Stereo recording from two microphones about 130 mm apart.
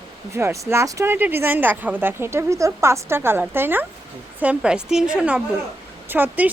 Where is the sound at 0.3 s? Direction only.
20° right (ahead or behind).